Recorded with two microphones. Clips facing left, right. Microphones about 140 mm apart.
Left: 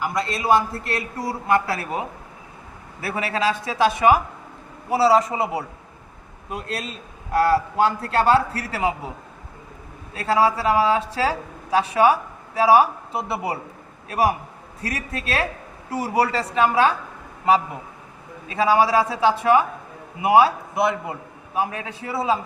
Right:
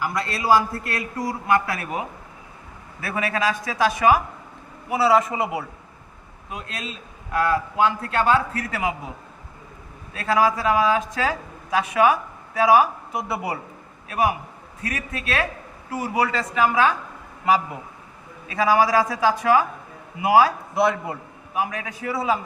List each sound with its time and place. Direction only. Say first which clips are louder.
0.0 s a man's voice: left 1 dB; 20° left (ahead or behind)
10.2 s a man's voice: left 1 dB; 30° left (ahead or behind)